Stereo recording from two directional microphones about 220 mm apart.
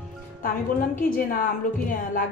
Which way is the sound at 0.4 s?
40° left (ahead or behind).